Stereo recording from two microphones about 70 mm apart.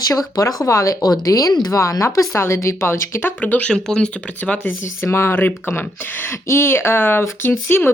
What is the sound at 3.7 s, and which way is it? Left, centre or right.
Speech, centre.